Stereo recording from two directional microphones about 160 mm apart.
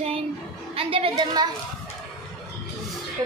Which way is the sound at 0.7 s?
35° right (ahead or behind).